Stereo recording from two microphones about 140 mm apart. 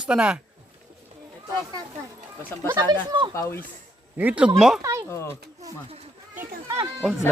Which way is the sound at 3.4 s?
20° left (ahead or behind).